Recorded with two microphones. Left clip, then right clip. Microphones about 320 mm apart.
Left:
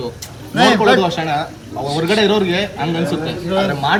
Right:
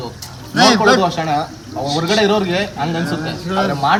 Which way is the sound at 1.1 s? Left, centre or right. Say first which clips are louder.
Right 1 dB; centre.